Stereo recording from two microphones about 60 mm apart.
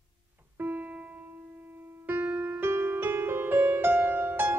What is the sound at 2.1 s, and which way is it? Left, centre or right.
Music, right.